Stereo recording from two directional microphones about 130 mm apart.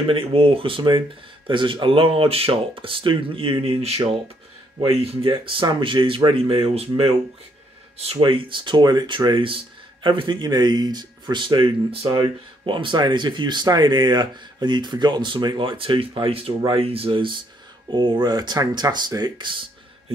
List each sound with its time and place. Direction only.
0.1 s speech: 45° right (ahead or behind)
8.0 s speech: 45° right (ahead or behind)